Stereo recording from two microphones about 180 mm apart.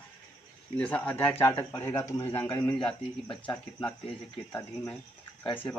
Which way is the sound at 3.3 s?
25° left (ahead or behind).